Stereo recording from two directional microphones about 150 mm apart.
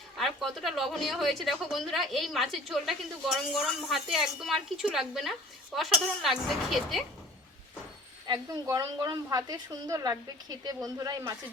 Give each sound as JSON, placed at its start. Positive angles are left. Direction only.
{"t": 0.2, "sound": "a woman's voice", "side_deg": 0}
{"t": 8.3, "sound": "a woman's voice", "side_deg": -25}